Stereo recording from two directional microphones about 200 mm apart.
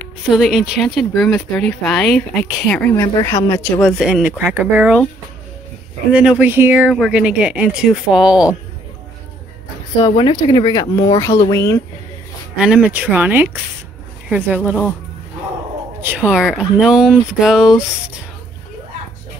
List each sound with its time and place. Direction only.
0.3 s speech: centre (ahead or behind)
3.0 s speech: 20° left (ahead or behind)
3.8 s speech: centre (ahead or behind)
6.1 s speech: 5° right (ahead or behind)
10.0 s speech: 25° left (ahead or behind)
12.5 s speech: 5° right (ahead or behind)
14.6 s speech: 10° left (ahead or behind)
16.0 s speech: 10° right (ahead or behind)